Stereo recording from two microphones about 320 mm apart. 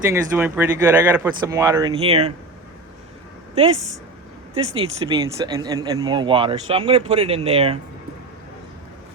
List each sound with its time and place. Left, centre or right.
0.1 s speech: centre
3.5 s speech: centre